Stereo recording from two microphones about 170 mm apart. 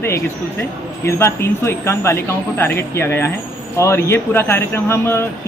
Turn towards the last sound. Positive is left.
turn(degrees=15)  # may be behind; listen again after turning